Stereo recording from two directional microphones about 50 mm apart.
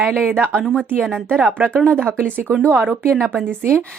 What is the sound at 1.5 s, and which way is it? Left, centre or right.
Speech, right.